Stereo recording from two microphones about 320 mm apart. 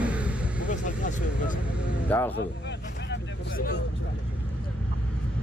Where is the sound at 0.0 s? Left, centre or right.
Centre.